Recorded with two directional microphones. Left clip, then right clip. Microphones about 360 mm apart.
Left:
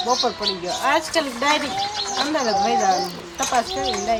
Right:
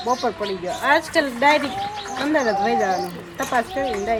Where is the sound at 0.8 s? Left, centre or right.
Centre.